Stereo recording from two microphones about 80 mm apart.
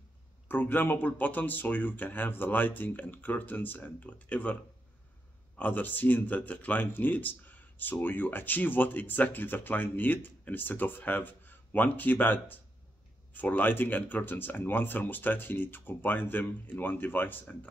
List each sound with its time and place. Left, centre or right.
0.5 s speech: left
5.6 s speech: left